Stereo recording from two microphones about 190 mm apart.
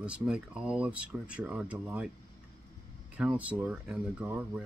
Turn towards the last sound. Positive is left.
turn(degrees=-5)  # may be behind; listen again after turning